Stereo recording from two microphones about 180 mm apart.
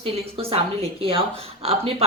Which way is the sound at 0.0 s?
30° right (ahead or behind).